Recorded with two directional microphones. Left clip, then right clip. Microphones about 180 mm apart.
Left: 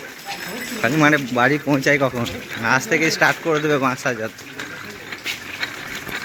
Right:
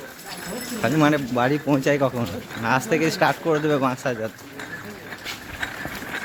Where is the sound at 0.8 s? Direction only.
Centre (ahead or behind).